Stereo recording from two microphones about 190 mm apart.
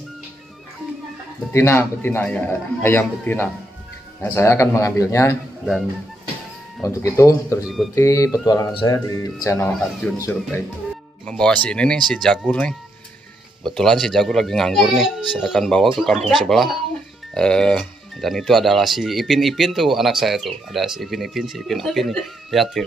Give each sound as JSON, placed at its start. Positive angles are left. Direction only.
{"t": 1.5, "sound": "a man's voice", "side_deg": 15}
{"t": 6.8, "sound": "a man's voice", "side_deg": 15}
{"t": 7.6, "sound": "speech", "side_deg": 0}
{"t": 7.9, "sound": "a man's voice", "side_deg": 15}
{"t": 9.7, "sound": "speech", "side_deg": 0}
{"t": 11.2, "sound": "speech", "side_deg": 5}